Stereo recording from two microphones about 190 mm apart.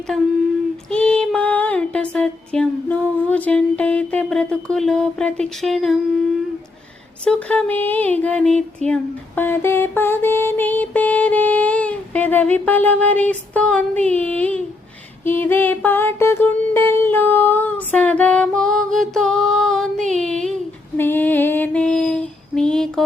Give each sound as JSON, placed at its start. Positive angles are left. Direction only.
{"t": 0.9, "sound": "music", "side_deg": 5}
{"t": 7.3, "sound": "a sound", "side_deg": 5}
{"t": 20.1, "sound": "speech", "side_deg": 5}
{"t": 20.9, "sound": "female singing", "side_deg": 10}